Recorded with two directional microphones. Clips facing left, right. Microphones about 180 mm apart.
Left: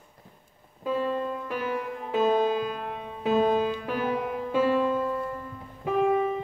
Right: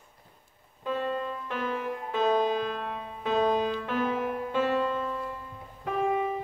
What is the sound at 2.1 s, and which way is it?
Music, 10° left (ahead or behind).